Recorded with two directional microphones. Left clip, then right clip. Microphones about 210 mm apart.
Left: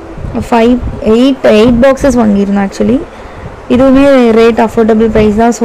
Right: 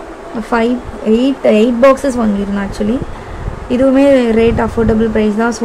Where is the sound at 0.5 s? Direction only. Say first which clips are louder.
Left 6 dB; 30° left (ahead or behind).